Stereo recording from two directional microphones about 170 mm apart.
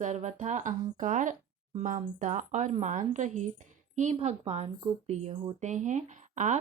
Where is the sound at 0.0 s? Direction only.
45° right (ahead or behind).